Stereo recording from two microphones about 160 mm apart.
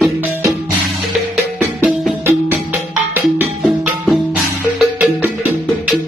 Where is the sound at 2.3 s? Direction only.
15° right (ahead or behind).